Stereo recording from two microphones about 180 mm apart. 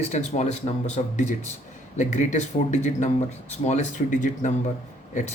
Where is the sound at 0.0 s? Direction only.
40° left (ahead or behind).